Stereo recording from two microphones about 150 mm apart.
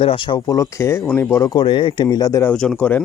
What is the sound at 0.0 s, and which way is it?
Speech, 35° left (ahead or behind).